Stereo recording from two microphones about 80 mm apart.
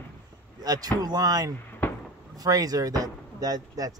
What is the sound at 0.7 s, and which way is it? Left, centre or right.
Speech, right.